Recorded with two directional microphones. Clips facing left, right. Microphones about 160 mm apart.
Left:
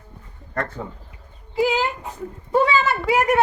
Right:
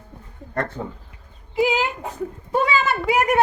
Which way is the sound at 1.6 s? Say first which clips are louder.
Even; 15° right (ahead or behind).